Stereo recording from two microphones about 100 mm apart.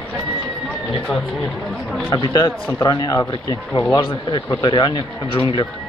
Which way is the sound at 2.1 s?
40° left (ahead or behind).